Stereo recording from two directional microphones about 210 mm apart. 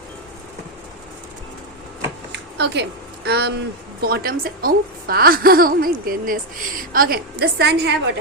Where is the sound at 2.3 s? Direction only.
55° right (ahead or behind).